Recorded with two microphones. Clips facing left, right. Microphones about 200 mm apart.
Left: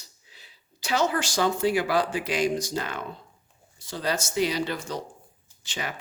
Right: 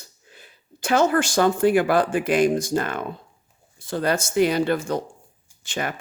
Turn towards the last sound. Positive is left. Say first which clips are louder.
# right 6 dB
turn(degrees=-50)  # may be behind; listen again after turning